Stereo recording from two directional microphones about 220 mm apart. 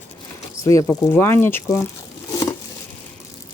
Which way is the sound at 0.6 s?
15° left (ahead or behind).